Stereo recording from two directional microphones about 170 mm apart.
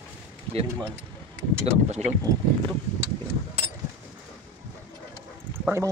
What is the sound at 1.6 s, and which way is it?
Speech, 40° right (ahead or behind).